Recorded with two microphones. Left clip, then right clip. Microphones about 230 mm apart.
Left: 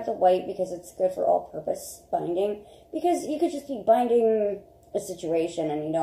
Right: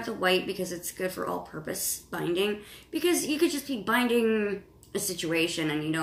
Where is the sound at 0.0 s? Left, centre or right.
Right.